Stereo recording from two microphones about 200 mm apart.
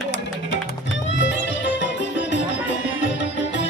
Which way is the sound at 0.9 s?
65° left (ahead or behind).